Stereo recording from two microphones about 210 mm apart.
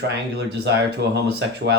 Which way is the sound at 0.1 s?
55° right (ahead or behind).